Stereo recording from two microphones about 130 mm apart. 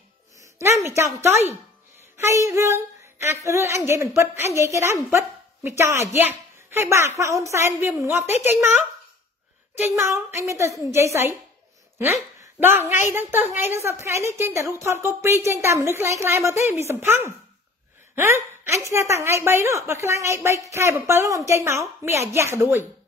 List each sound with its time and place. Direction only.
0.8 s a woman's voice: 20° right (ahead or behind)